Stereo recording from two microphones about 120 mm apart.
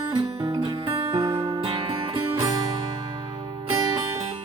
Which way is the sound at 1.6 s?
45° right (ahead or behind).